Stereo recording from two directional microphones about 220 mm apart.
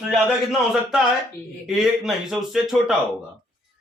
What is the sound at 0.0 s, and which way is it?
A man's voice, centre (ahead or behind).